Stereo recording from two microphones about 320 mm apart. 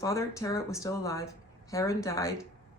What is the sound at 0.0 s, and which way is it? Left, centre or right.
Speech, centre.